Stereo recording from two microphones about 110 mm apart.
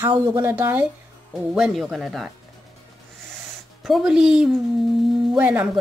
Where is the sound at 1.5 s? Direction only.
5° right (ahead or behind).